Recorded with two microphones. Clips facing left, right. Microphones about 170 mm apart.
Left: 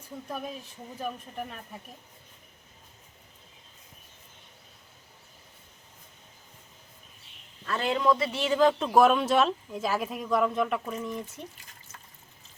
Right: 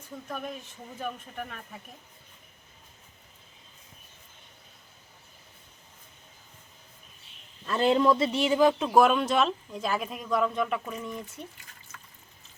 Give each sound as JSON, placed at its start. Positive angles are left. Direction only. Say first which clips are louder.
{"t": 0.3, "sound": "speech", "louder": "even", "side_deg": 10}
{"t": 7.6, "sound": "a man's voice", "louder": "right 4 dB", "side_deg": -20}
{"t": 7.9, "sound": "speech", "louder": "left 1 dB", "side_deg": -30}
{"t": 8.3, "sound": "speech", "louder": "right 1 dB", "side_deg": -15}
{"t": 8.9, "sound": "speech", "louder": "left 1 dB", "side_deg": 0}